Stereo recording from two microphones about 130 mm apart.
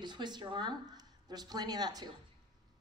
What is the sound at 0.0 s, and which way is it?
A woman's voice, 35° right (ahead or behind).